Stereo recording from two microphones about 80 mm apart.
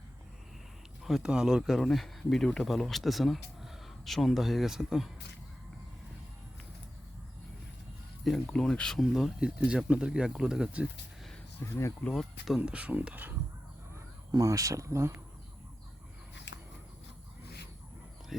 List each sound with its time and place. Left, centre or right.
1.0 s speech: centre
8.2 s speech: centre
9.0 s speech: centre
11.6 s speech: left
12.5 s speech: centre
14.3 s speech: right